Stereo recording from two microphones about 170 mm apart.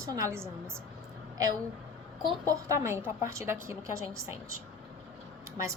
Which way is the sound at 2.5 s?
15° right (ahead or behind).